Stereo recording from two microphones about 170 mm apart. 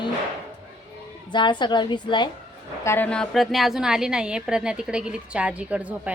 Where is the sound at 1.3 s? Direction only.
25° left (ahead or behind).